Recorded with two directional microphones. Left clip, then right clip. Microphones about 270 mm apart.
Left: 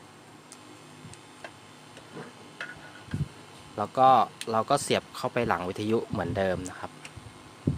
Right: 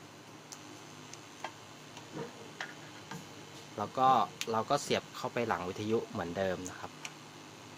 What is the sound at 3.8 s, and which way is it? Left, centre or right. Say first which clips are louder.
Speech: left 7 dB; left.